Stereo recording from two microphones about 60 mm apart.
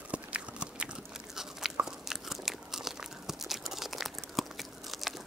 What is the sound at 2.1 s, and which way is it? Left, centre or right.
Crunch, centre.